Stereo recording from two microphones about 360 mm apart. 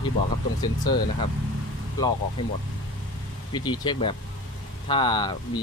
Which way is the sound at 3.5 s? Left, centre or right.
Centre.